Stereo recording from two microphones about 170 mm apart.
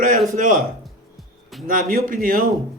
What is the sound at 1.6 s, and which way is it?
Speech, 55° right (ahead or behind).